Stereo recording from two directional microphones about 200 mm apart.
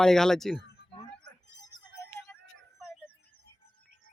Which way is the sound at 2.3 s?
10° left (ahead or behind).